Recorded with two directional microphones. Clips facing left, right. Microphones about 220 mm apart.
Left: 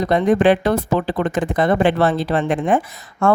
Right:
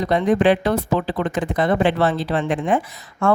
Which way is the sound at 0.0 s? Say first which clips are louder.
Left 2 dB; 45° left (ahead or behind).